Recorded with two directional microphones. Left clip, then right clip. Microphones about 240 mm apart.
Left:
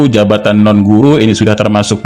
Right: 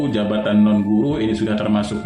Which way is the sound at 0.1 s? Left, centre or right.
Left.